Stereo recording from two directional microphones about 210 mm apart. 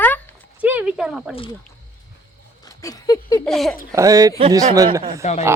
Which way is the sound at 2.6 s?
15° left (ahead or behind).